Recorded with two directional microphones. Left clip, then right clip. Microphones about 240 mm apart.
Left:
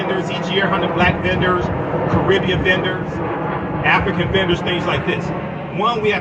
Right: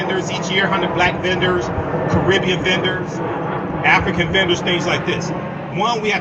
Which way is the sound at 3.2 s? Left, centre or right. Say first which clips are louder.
Even; centre.